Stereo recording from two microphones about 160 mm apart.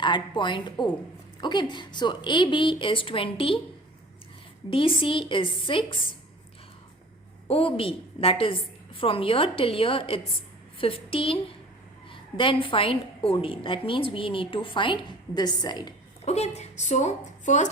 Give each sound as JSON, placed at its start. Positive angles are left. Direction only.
{"t": 0.0, "sound": "a woman's voice", "side_deg": 30}
{"t": 4.7, "sound": "a woman's voice", "side_deg": 35}
{"t": 7.4, "sound": "a woman's voice", "side_deg": 35}
{"t": 16.2, "sound": "speech", "side_deg": 45}